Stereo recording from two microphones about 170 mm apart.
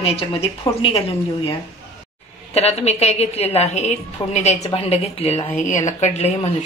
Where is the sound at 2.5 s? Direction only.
40° left (ahead or behind).